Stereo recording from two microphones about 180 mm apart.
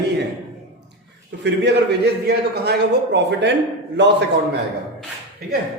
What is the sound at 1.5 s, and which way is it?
A man's voice, 70° right (ahead or behind).